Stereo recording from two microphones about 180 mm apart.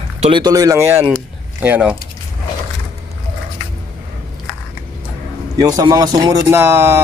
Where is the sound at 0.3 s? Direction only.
20° right (ahead or behind).